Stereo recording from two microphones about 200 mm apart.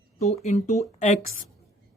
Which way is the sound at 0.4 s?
35° left (ahead or behind).